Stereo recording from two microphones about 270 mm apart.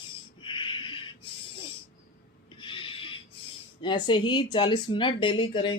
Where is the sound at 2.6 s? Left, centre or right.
Centre.